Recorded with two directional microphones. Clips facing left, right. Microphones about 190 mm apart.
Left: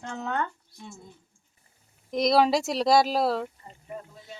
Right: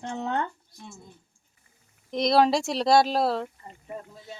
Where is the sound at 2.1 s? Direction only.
Centre (ahead or behind).